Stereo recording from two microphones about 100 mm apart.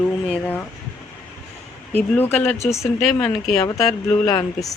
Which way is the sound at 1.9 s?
15° left (ahead or behind).